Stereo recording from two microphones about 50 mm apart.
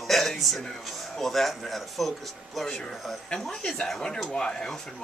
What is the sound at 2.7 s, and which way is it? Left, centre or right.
Speech, centre.